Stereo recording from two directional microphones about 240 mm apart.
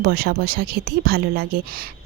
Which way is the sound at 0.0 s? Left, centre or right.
Right.